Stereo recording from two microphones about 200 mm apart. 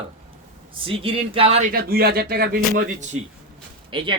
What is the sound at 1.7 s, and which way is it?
Speech, 50° right (ahead or behind).